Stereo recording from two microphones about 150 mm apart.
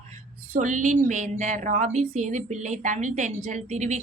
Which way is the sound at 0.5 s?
55° right (ahead or behind).